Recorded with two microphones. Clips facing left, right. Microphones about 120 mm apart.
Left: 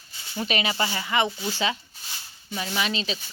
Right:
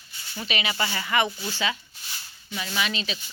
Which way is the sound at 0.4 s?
35° left (ahead or behind).